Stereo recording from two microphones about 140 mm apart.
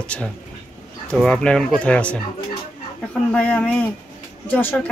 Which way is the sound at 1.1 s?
5° left (ahead or behind).